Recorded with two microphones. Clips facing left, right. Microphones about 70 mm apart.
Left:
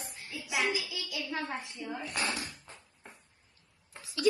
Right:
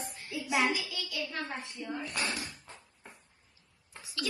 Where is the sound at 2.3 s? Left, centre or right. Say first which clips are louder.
Left 1 dB; left.